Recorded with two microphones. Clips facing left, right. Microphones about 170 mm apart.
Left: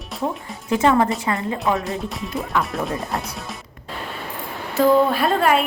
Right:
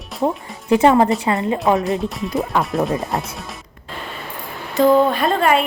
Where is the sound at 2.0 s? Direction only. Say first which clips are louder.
Right 5 dB; centre (ahead or behind).